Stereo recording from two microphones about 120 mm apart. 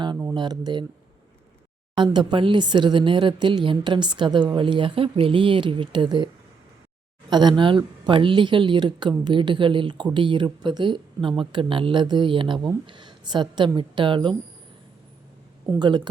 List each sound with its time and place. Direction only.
0.3 s speech: 35° right (ahead or behind)
2.0 s speech: 40° right (ahead or behind)
15.8 s speech: 40° right (ahead or behind)